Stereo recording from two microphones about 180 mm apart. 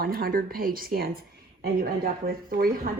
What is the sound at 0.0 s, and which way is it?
Speech, 55° right (ahead or behind).